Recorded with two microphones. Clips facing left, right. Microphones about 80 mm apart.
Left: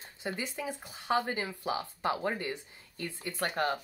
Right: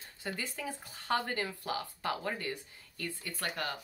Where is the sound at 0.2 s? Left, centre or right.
Left.